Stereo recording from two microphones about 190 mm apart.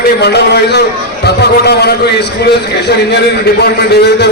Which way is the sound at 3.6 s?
60° left (ahead or behind).